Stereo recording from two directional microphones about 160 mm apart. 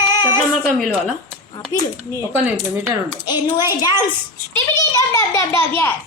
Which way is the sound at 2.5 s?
10° right (ahead or behind).